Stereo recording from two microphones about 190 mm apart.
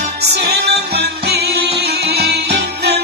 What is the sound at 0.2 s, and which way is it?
Music, 60° right (ahead or behind).